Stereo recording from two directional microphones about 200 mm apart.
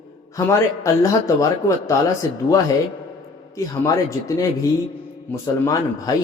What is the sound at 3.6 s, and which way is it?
A man's voice, 15° left (ahead or behind).